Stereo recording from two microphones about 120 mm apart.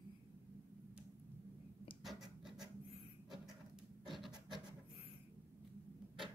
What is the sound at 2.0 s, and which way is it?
Scratch, centre (ahead or behind).